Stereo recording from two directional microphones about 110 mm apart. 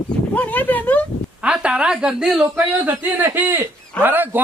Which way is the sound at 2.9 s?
20° right (ahead or behind).